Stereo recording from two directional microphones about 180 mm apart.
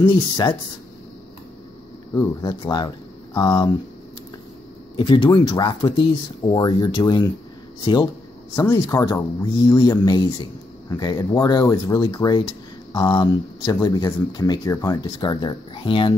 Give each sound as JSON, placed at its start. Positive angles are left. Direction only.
{"t": 0.0, "sound": "speech", "side_deg": 25}
{"t": 2.6, "sound": "speech", "side_deg": 25}
{"t": 4.9, "sound": "speech", "side_deg": 25}